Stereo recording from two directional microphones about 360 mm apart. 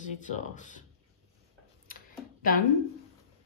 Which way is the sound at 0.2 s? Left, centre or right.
Left.